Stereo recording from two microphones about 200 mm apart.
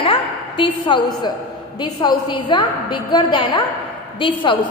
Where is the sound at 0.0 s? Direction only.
25° left (ahead or behind).